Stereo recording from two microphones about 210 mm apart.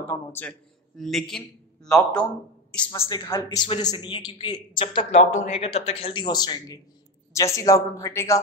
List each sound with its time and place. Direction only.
0.0 s a man's voice: 10° left (ahead or behind)
2.9 s a woman's voice: 20° left (ahead or behind)